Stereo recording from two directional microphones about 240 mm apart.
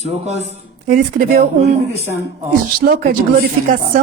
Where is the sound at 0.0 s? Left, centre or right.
Right.